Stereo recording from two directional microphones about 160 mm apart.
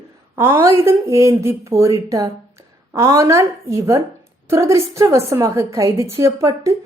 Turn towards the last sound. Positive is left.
turn(degrees=-20)  # may be behind; listen again after turning